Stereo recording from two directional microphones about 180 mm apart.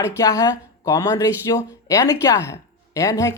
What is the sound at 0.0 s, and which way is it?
A woman's voice, 15° left (ahead or behind).